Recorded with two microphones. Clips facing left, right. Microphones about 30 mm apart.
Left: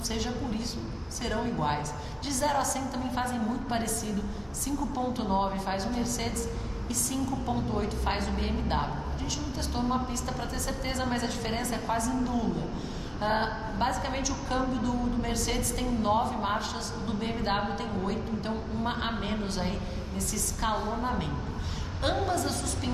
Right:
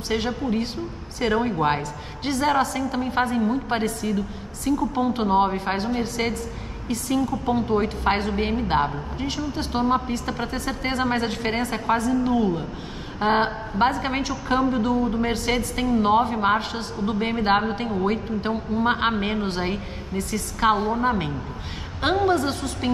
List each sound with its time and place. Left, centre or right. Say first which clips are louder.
0.1 s a woman's voice: right 10 dB; right